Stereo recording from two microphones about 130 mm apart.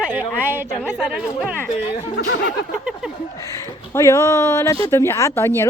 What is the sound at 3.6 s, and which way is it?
Speech, 25° left (ahead or behind).